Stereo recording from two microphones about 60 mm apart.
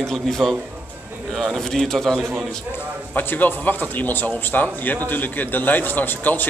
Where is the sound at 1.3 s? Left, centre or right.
Centre.